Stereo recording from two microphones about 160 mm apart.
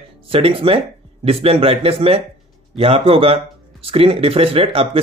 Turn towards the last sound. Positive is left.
turn(degrees=-35)  # may be behind; listen again after turning